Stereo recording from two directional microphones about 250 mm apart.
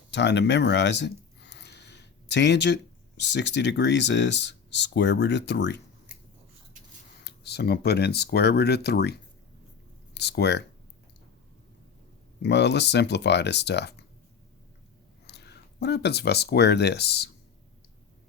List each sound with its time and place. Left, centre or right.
0.1 s a sound: left
3.3 s speech: left
7.3 s speech: left
10.2 s speech: left
12.4 s speech: left
15.3 s speech: left